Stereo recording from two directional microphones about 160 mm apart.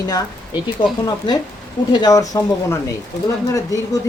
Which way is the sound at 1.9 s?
25° left (ahead or behind).